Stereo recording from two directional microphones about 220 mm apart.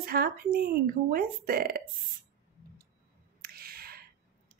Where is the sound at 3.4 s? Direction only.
45° right (ahead or behind).